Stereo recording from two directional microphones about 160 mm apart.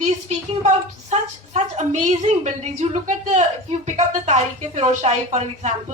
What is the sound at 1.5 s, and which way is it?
Speech, 45° right (ahead or behind).